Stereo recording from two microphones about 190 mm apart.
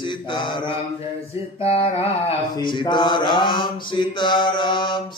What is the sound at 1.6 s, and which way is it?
Clapping, 30° left (ahead or behind).